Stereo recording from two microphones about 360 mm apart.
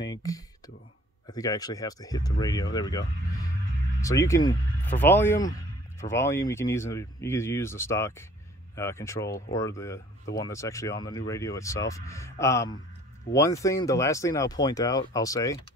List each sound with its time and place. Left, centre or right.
0.0 s speech: centre
4.0 s speech: centre